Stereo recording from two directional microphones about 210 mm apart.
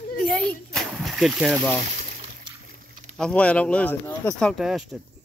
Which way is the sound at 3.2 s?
5° left (ahead or behind).